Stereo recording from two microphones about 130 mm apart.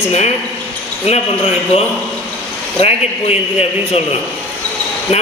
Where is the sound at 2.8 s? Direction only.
50° left (ahead or behind).